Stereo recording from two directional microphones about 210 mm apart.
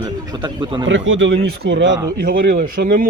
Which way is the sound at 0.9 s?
60° right (ahead or behind).